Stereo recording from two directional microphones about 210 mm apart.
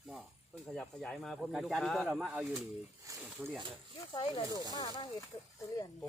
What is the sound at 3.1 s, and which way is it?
Speech, 15° right (ahead or behind).